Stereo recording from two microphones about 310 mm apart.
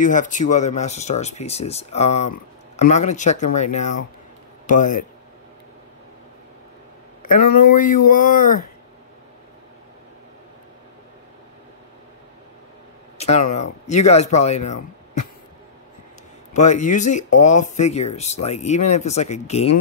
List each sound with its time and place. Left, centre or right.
0.0 s speech: left
7.4 s speech: left
7.7 s speech: left
13.2 s speech: left
16.5 s speech: left